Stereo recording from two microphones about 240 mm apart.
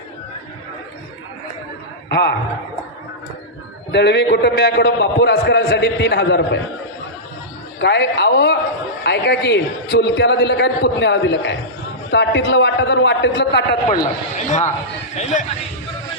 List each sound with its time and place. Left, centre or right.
2.0 s a man's voice: left
3.9 s a man's voice: left
7.8 s a man's voice: left
14.3 s a man's voice: left